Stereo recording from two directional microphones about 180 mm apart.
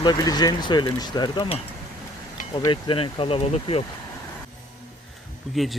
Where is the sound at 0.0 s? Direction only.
20° left (ahead or behind).